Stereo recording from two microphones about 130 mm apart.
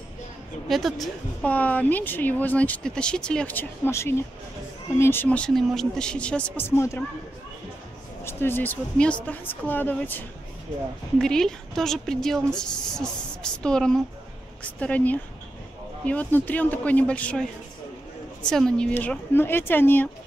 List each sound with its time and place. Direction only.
0.7 s a woman's voice: centre (ahead or behind); by 7.0 s 20° left (ahead or behind)
8.2 s a woman's voice: 20° left (ahead or behind)